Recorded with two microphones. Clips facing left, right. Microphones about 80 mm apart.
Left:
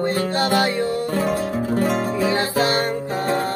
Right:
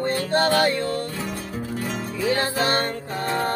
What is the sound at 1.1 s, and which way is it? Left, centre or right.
Music, left.